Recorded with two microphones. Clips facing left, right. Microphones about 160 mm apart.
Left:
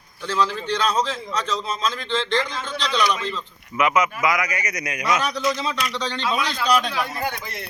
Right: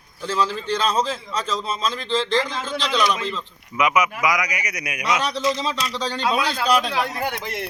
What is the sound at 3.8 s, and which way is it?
A man's voice, 15° right (ahead or behind).